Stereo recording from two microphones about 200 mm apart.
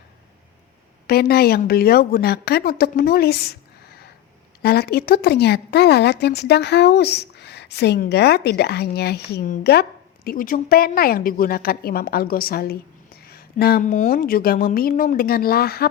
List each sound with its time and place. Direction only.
1.0 s a woman's voice: 50° left (ahead or behind)